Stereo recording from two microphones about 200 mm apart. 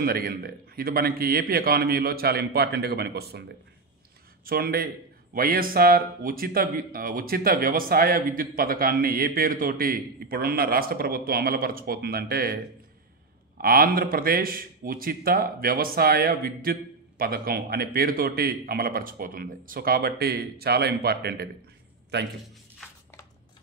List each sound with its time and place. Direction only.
0.0 s speech: 50° right (ahead or behind)
4.5 s speech: 50° right (ahead or behind)
13.6 s a man's voice: 45° right (ahead or behind)